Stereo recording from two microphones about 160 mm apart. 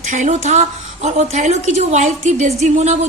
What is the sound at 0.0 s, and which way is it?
A woman's voice, 50° right (ahead or behind).